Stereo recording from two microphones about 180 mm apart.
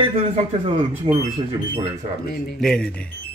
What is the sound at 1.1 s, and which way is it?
Speech, 30° right (ahead or behind).